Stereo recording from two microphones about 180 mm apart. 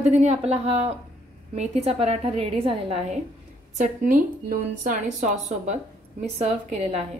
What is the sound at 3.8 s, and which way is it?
A woman's voice, 45° right (ahead or behind).